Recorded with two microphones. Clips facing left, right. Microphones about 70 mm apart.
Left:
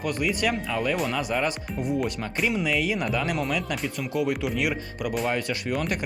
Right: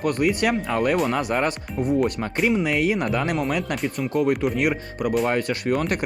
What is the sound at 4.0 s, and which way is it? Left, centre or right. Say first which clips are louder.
Speech: right 6 dB; right.